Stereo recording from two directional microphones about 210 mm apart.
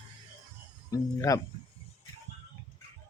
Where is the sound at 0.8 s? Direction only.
15° left (ahead or behind).